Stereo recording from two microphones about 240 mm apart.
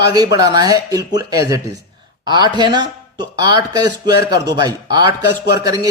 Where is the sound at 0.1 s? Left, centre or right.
Centre.